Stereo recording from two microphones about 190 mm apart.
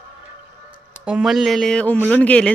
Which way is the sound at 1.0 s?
5° right (ahead or behind).